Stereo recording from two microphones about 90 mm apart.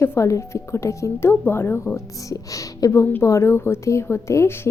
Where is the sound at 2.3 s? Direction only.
40° left (ahead or behind).